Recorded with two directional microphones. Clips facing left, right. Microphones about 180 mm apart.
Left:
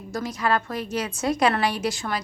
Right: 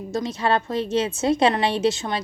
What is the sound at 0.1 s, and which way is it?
A woman's voice, 25° right (ahead or behind).